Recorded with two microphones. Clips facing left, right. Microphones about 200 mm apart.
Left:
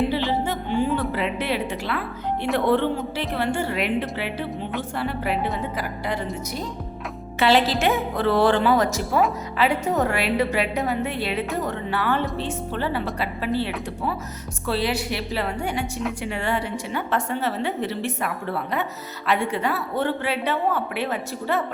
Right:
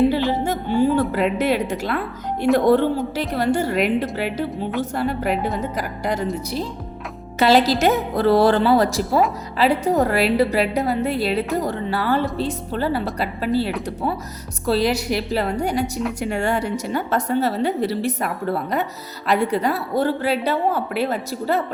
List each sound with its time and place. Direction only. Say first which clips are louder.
0.4 s music: right 5 dB; 40° right (ahead or behind)
2.6 s a woman's voice: right 4 dB; 40° right (ahead or behind)
7.3 s a woman's voice: right 3 dB; 40° right (ahead or behind)
14.7 s a woman's voice: right 5 dB; 40° right (ahead or behind)